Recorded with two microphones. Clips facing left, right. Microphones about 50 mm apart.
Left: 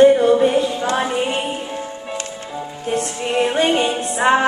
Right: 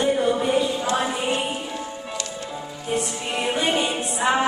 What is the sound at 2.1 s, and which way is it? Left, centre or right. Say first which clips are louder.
Music: left 3 dB; left.